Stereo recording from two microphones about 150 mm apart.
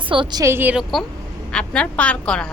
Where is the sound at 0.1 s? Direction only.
30° right (ahead or behind).